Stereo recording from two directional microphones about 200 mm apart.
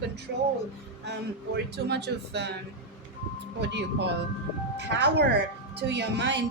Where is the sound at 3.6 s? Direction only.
60° right (ahead or behind).